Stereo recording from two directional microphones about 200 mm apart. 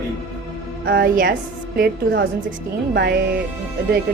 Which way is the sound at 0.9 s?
50° right (ahead or behind).